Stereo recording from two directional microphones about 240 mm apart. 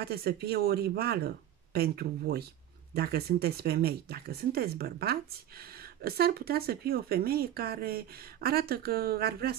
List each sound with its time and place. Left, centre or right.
0.0 s speech: right